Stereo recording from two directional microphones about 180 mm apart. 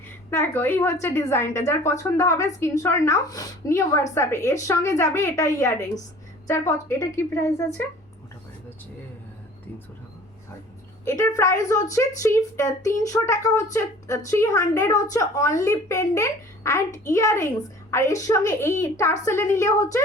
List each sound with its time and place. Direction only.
0.3 s a woman's voice: 10° left (ahead or behind)
11.0 s a woman's voice: 15° left (ahead or behind)